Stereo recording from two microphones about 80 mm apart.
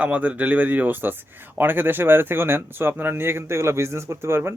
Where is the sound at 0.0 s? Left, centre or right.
Centre.